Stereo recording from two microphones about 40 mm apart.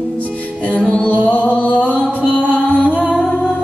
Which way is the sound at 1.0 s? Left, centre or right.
Left.